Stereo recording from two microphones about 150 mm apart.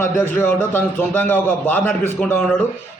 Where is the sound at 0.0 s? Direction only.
15° left (ahead or behind).